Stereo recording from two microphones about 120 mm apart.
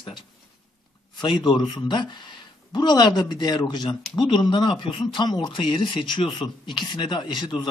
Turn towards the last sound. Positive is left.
turn(degrees=40)  # may be behind; listen again after turning